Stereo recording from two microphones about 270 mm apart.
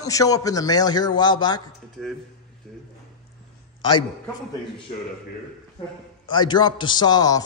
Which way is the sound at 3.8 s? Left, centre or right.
Centre.